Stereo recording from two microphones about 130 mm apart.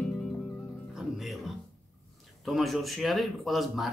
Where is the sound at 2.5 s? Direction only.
Centre (ahead or behind).